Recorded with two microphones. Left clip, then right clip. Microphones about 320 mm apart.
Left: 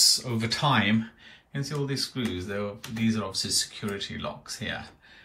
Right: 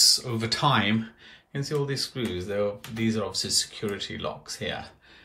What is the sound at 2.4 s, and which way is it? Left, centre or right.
Speech, right.